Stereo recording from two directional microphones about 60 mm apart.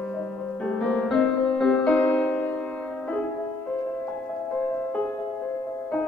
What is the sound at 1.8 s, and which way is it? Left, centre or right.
Music, left.